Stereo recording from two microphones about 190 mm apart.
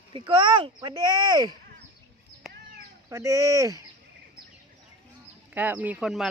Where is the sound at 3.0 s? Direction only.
15° right (ahead or behind).